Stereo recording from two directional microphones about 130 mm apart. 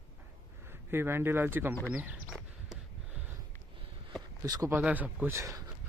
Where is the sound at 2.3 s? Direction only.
5° right (ahead or behind).